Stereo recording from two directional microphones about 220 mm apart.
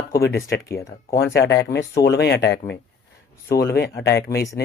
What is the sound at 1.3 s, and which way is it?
Speech, 50° left (ahead or behind).